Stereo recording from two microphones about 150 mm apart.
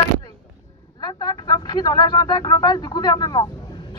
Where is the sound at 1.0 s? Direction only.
25° left (ahead or behind).